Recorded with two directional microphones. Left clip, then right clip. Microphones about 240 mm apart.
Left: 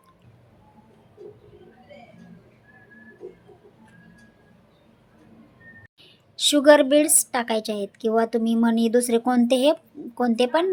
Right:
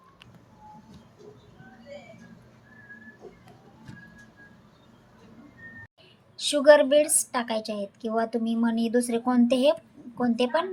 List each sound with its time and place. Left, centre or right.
6.3 s a woman's voice: left